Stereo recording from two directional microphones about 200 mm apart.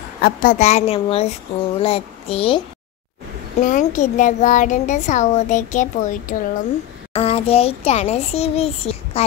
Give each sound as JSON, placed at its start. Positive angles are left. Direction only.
{"t": 0.2, "sound": "speech", "side_deg": 45}
{"t": 3.6, "sound": "a child's voice", "side_deg": 40}
{"t": 7.2, "sound": "a child's voice", "side_deg": 30}